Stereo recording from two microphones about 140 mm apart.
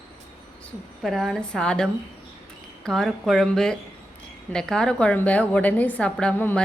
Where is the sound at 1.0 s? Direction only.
Centre (ahead or behind).